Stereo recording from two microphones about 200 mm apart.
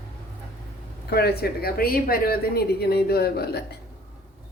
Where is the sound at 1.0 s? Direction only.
50° left (ahead or behind).